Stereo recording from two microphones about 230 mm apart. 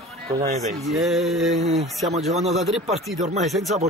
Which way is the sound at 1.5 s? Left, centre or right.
Right.